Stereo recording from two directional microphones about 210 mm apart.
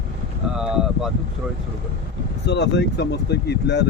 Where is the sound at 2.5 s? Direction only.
55° left (ahead or behind).